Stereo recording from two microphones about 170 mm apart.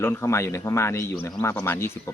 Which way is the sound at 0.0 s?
15° left (ahead or behind).